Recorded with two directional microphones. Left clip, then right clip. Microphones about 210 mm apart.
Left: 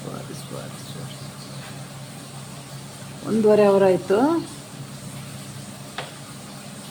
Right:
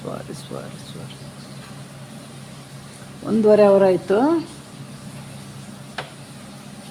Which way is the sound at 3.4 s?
10° right (ahead or behind).